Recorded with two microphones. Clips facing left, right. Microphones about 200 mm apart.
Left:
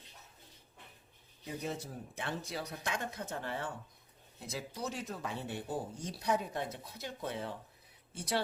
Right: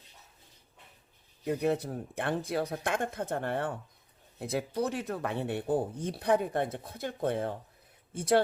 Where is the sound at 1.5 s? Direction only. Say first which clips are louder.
Right 11 dB; 65° right (ahead or behind).